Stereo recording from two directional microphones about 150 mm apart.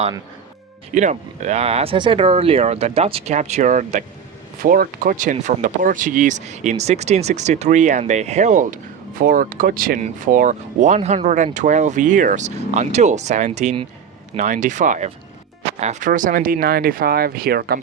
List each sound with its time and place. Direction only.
0.9 s speech: 55° right (ahead or behind)
4.6 s speech: 70° right (ahead or behind)
10.0 s speech: 60° right (ahead or behind); by 17.7 s 90° right